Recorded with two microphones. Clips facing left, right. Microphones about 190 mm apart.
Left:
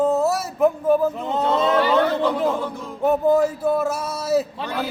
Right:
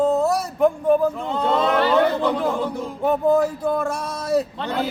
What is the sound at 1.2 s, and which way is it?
Speech, 20° left (ahead or behind).